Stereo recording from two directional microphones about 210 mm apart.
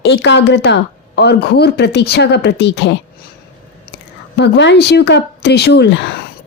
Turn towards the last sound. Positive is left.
turn(degrees=55)  # may be behind; listen again after turning